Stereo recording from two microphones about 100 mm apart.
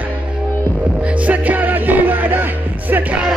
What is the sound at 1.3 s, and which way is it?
Music, 15° right (ahead or behind).